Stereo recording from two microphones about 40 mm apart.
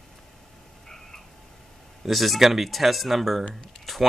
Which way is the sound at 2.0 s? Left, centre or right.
Centre.